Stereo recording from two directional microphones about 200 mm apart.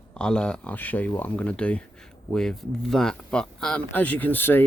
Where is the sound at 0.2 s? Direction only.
5° left (ahead or behind).